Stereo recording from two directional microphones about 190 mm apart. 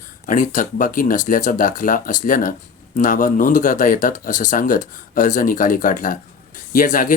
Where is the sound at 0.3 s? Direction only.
45° left (ahead or behind).